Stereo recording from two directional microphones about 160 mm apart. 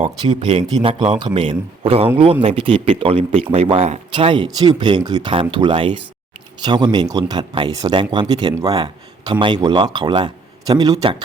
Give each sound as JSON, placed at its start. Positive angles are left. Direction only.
{"t": 0.0, "sound": "speech", "side_deg": -30}